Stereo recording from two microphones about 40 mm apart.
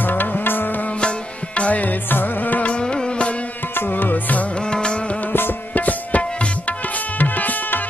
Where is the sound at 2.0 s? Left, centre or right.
Left.